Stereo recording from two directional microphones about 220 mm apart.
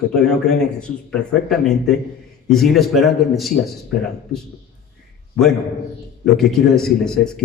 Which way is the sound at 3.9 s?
45° left (ahead or behind).